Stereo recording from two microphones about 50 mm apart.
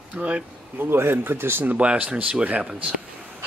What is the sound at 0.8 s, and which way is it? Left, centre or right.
Speech, right.